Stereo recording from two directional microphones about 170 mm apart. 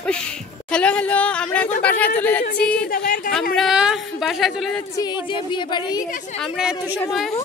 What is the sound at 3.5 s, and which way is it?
Speech, centre (ahead or behind).